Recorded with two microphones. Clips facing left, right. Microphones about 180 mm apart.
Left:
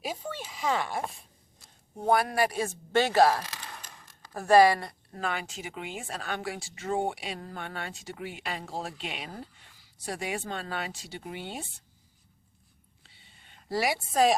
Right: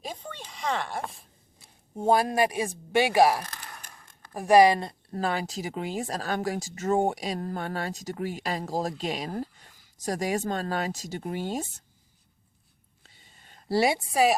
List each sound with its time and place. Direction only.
0.0 s a sound: 5° left (ahead or behind)
2.0 s speech: 25° right (ahead or behind)
5.1 s speech: 35° right (ahead or behind)
13.0 s a sound: 45° right (ahead or behind)
13.7 s a woman's voice: 25° right (ahead or behind)
14.1 s speech: 10° right (ahead or behind)